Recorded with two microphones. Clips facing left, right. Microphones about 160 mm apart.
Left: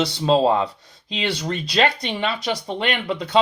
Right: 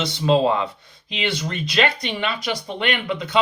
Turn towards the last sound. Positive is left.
turn(degrees=35)  # may be behind; listen again after turning